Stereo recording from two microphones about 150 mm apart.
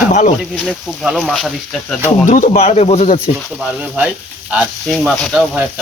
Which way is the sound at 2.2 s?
55° left (ahead or behind).